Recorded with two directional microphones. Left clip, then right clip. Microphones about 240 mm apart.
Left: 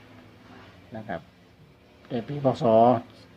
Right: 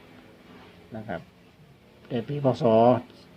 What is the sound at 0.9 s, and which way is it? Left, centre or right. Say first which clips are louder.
Speech: even; centre.